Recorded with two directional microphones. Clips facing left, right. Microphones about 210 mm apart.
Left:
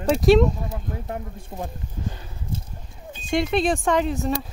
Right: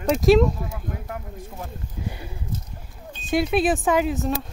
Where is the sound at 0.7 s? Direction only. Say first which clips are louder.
Left 2 dB; 35° left (ahead or behind).